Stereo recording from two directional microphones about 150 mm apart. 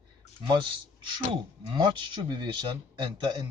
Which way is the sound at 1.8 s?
35° right (ahead or behind).